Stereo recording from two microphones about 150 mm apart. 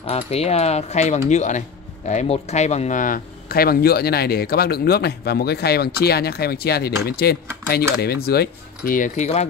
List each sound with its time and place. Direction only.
0.0 s speech: 45° left (ahead or behind)